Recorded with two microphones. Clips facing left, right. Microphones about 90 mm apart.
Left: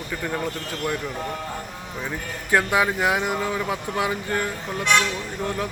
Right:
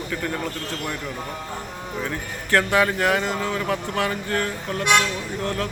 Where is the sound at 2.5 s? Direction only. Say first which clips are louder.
Right 1 dB; 15° left (ahead or behind).